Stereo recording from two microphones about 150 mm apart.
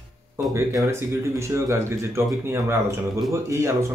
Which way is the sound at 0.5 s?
15° right (ahead or behind).